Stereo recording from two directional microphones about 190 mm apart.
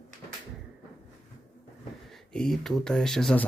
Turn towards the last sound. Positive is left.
turn(degrees=5)  # may be behind; listen again after turning